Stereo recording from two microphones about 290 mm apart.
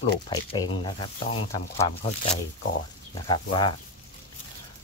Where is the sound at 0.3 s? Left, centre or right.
Centre.